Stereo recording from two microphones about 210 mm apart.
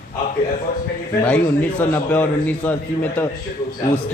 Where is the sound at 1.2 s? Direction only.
5° left (ahead or behind).